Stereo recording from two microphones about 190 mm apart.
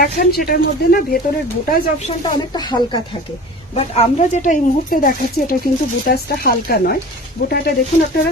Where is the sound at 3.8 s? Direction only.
35° left (ahead or behind); by 7.8 s 55° left (ahead or behind).